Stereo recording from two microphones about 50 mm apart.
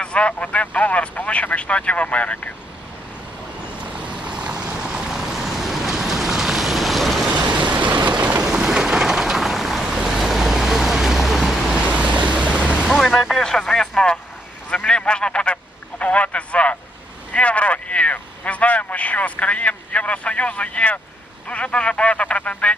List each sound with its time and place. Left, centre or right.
0.0 s vehicle: left
4.0 s vehicle: right; by 7.3 s centre
7.8 s vehicle: right
8.4 s vehicle: centre
11.9 s waves: right
12.9 s speech: centre
14.8 s a sound: centre
21.5 s speech: left